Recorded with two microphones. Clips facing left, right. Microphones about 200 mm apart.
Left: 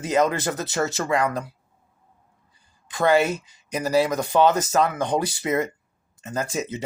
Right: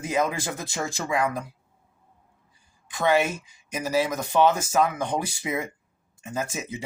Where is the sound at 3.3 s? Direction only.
10° right (ahead or behind).